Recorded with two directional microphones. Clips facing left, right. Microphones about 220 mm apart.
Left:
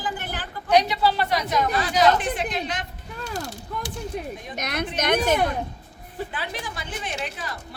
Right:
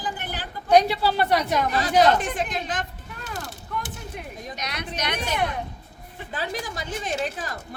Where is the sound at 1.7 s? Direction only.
40° right (ahead or behind).